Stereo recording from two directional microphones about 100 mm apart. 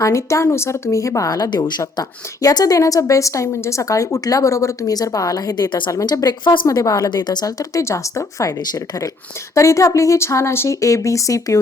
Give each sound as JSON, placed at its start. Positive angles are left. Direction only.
{"t": 0.0, "sound": "a woman's voice", "side_deg": 30}
{"t": 5.9, "sound": "speech", "side_deg": 35}
{"t": 6.8, "sound": "a woman's voice", "side_deg": 40}